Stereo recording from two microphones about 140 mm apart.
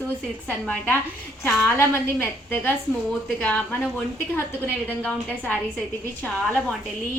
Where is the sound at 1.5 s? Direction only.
15° left (ahead or behind).